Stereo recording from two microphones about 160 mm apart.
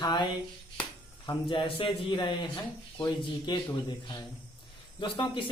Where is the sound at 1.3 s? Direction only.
30° left (ahead or behind).